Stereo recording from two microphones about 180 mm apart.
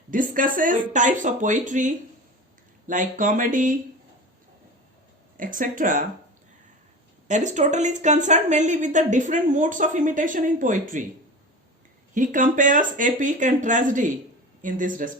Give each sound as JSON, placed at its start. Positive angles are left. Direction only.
{"t": 0.1, "sound": "speech", "side_deg": -50}
{"t": 5.4, "sound": "speech", "side_deg": -50}
{"t": 7.3, "sound": "speech", "side_deg": -40}
{"t": 12.1, "sound": "speech", "side_deg": -45}